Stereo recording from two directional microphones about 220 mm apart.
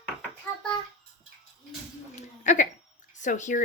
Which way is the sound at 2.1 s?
35° left (ahead or behind).